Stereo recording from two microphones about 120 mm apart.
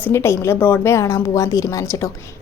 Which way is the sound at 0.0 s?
20° left (ahead or behind).